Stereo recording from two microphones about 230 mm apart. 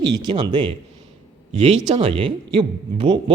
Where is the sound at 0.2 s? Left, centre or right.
Centre.